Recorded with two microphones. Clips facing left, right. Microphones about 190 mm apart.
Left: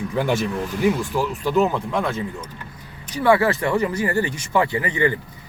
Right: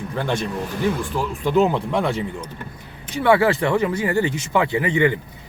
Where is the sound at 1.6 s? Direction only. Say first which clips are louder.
Right 2 dB; 30° right (ahead or behind).